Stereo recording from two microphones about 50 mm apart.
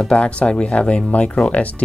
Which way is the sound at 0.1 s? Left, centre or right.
Left.